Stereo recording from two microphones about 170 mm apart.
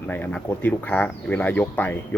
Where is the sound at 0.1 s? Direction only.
10° left (ahead or behind).